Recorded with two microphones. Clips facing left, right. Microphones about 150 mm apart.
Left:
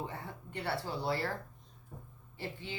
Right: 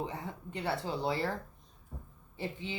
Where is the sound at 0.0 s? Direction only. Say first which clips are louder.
Right 3 dB; 15° right (ahead or behind).